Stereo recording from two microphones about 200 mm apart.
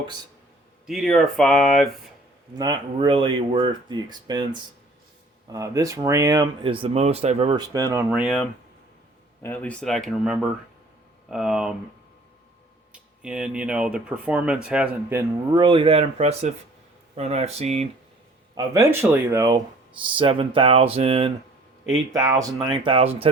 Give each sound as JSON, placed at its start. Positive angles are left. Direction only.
{"t": 0.9, "sound": "speech", "side_deg": 0}
{"t": 2.6, "sound": "speech", "side_deg": -20}
{"t": 5.5, "sound": "speech", "side_deg": -20}
{"t": 12.9, "sound": "speech", "side_deg": -5}
{"t": 15.5, "sound": "speech", "side_deg": -25}
{"t": 18.5, "sound": "speech", "side_deg": -15}
{"t": 22.1, "sound": "speech", "side_deg": -15}